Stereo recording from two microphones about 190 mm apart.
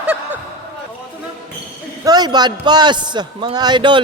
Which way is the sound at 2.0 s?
20° right (ahead or behind).